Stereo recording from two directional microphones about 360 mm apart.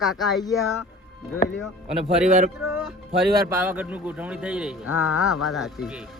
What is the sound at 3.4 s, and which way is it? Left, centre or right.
Speech, centre.